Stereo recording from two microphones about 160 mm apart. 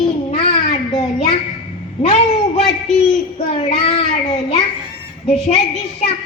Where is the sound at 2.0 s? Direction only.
40° left (ahead or behind).